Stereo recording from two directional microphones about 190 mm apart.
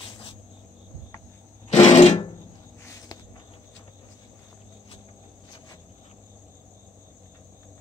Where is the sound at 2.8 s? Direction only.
15° left (ahead or behind).